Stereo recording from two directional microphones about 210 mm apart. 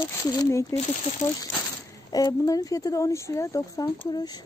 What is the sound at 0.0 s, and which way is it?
Speech, 15° left (ahead or behind).